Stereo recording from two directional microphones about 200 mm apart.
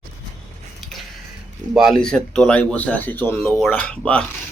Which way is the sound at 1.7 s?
Centre (ahead or behind).